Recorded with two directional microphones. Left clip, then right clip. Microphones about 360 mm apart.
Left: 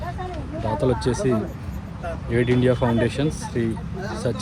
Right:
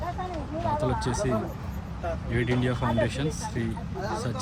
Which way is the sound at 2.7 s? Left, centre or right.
Centre.